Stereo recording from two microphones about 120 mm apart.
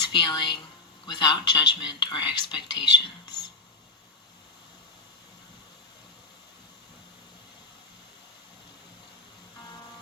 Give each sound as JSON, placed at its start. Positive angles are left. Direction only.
{"t": 0.1, "sound": "speech", "side_deg": 35}